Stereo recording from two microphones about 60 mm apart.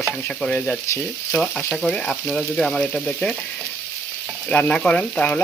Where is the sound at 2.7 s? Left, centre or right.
Centre.